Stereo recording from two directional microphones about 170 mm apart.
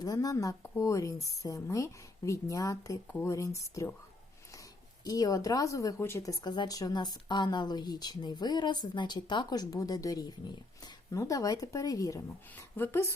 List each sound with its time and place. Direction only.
0.0 s a woman's voice: 20° left (ahead or behind)
5.0 s a woman's voice: 20° left (ahead or behind)